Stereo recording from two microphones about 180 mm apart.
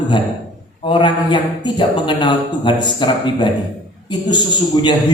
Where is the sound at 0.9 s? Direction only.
25° left (ahead or behind).